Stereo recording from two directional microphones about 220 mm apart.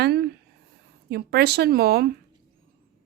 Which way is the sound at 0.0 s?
50° right (ahead or behind).